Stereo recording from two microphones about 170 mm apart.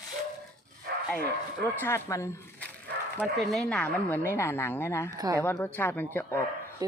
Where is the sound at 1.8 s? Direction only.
15° left (ahead or behind).